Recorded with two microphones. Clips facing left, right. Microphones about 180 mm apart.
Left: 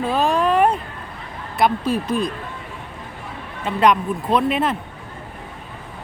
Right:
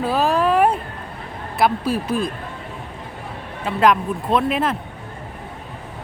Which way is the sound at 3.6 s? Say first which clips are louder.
Even; centre (ahead or behind).